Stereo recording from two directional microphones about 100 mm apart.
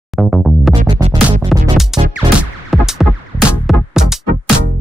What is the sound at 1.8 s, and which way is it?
Music, 5° right (ahead or behind).